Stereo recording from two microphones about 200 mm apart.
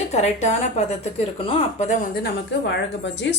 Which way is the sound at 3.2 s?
60° left (ahead or behind).